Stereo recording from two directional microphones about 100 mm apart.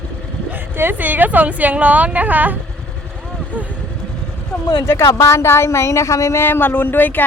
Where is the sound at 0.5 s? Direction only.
20° right (ahead or behind).